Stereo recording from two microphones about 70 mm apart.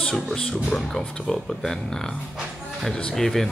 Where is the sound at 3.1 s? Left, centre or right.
Centre.